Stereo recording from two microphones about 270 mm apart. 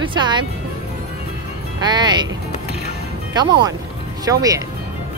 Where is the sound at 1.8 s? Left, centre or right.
Centre.